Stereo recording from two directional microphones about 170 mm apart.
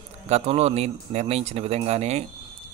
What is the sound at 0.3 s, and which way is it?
A man's voice, 35° right (ahead or behind).